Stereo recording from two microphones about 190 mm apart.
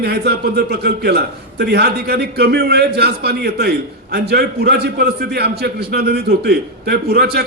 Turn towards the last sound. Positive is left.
turn(degrees=-55)  # may be behind; listen again after turning